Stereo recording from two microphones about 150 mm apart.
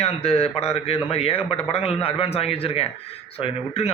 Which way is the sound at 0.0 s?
40° left (ahead or behind).